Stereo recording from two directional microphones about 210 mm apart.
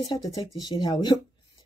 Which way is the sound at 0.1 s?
20° left (ahead or behind).